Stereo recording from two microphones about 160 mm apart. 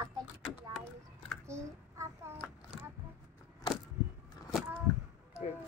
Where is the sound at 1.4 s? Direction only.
15° right (ahead or behind).